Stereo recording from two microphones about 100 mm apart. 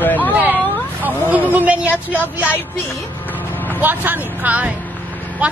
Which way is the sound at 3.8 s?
20° right (ahead or behind).